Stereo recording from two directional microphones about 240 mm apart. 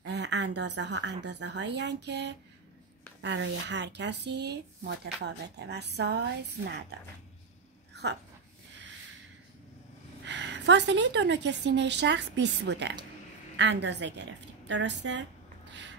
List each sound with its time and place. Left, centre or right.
0.0 s speech: right
7.9 s a sound: right
10.2 s speech: right